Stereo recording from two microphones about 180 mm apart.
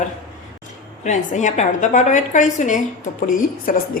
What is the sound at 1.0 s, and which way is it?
A woman's voice, 40° left (ahead or behind).